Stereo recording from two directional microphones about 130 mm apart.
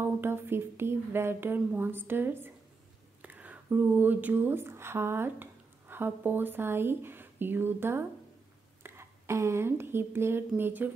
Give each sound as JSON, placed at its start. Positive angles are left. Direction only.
{"t": 0.0, "sound": "speech", "side_deg": -20}